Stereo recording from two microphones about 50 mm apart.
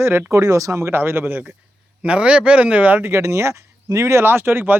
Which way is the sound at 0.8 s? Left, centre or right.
Right.